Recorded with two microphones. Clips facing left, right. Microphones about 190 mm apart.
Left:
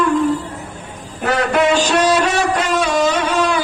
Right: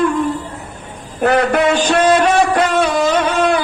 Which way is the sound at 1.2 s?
55° right (ahead or behind).